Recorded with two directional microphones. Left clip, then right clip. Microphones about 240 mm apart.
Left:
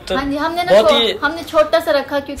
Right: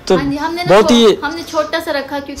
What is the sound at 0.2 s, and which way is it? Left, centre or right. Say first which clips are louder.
A woman's voice: even; centre.